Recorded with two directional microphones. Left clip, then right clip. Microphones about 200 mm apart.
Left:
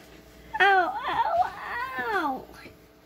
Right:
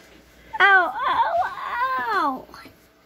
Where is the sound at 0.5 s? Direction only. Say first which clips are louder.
Right 5 dB; 30° right (ahead or behind).